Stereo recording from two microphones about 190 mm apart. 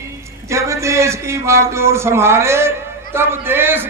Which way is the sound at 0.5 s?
15° right (ahead or behind).